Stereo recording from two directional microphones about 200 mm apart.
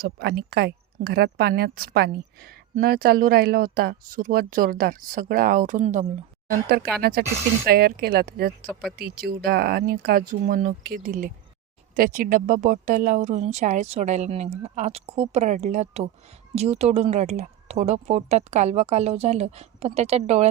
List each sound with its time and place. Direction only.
0.0 s speech: 55° right (ahead or behind); by 20.5 s 30° right (ahead or behind)